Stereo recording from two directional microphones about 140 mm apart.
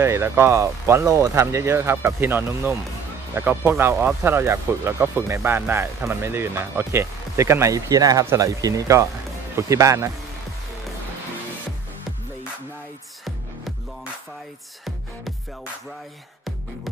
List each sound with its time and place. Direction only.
0.0 s speech: 20° right (ahead or behind)